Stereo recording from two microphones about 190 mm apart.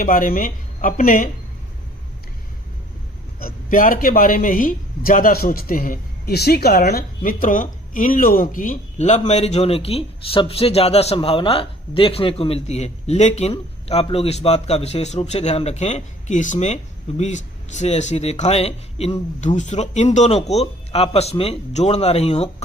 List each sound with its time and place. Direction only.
0.0 s speech: 45° left (ahead or behind)
3.4 s a man's voice: 45° left (ahead or behind)